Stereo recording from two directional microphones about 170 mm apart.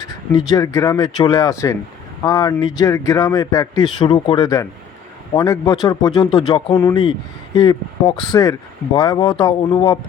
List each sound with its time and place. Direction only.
0.5 s speech: 20° left (ahead or behind)